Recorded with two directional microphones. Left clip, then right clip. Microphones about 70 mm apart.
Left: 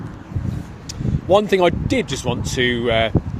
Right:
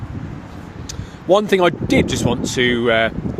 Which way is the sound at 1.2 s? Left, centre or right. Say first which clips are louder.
Right 1 dB; right.